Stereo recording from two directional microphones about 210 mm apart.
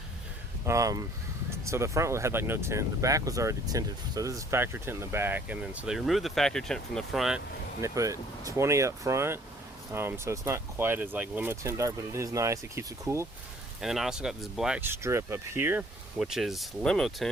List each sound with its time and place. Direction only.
0.6 s speech: 15° right (ahead or behind)
7.8 s speech: 15° right (ahead or behind)
13.8 s speech: centre (ahead or behind)